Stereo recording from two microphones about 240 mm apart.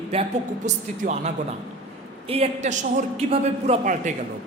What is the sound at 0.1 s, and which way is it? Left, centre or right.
A man's voice, right.